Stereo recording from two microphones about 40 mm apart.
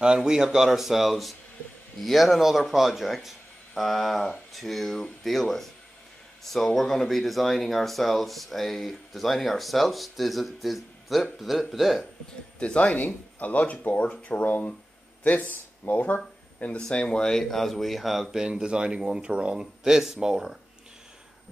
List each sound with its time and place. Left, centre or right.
0.0 s speech: right; by 12.1 s centre
12.5 s speech: left
12.9 s speech: left
14.4 s speech: left
16.7 s speech: left
17.2 s speech: centre
18.4 s speech: right